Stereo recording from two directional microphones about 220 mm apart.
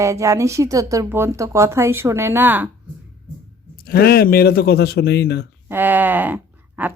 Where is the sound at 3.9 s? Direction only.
45° left (ahead or behind).